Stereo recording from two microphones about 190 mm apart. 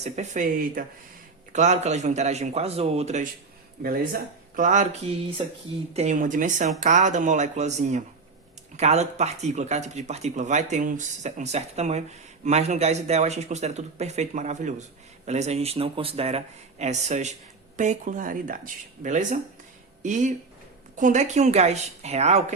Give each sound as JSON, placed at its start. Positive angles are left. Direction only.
{"t": 0.0, "sound": "speech", "side_deg": -40}
{"t": 3.8, "sound": "speech", "side_deg": -50}